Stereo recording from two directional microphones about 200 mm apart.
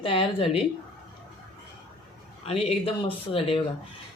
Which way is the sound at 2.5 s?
30° left (ahead or behind).